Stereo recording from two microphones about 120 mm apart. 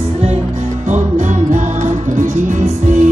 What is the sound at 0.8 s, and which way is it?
Music, 90° right.